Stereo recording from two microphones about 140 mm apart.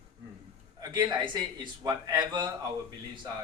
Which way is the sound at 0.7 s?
30° right (ahead or behind).